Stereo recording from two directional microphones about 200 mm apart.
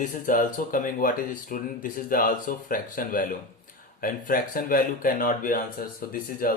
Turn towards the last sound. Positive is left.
turn(degrees=45)  # may be behind; listen again after turning